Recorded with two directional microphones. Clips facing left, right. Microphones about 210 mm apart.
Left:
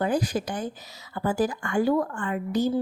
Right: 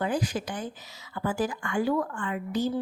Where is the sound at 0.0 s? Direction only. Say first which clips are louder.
Left 3 dB; 40° left (ahead or behind).